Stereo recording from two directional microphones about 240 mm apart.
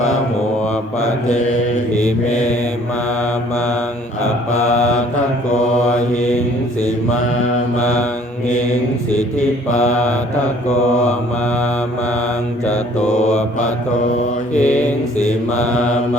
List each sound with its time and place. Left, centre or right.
2.0 s mantra: left
4.7 s mantra: left
9.7 s mantra: left
12.6 s mantra: left